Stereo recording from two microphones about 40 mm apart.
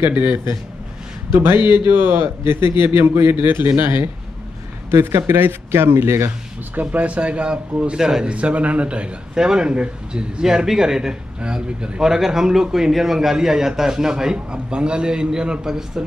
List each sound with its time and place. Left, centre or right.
0.1 s a man's voice: right
1.3 s a man's voice: right
5.0 s speech: right
6.7 s speech: right
8.0 s a man's voice: centre
8.3 s speech: right
9.3 s speech: centre
10.4 s a man's voice: centre